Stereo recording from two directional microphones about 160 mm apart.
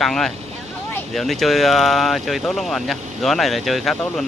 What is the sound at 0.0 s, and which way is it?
Speech, centre (ahead or behind).